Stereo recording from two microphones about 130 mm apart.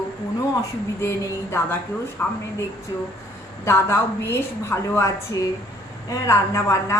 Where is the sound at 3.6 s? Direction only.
20° left (ahead or behind).